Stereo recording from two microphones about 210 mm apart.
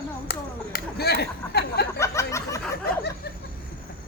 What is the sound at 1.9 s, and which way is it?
Speech, 15° left (ahead or behind).